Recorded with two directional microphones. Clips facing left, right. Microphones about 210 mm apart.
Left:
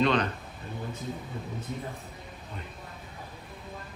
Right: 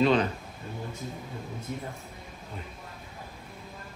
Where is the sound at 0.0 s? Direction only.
5° right (ahead or behind).